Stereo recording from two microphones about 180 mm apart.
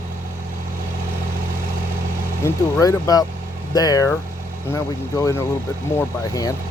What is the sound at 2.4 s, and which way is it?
Speech, 15° left (ahead or behind).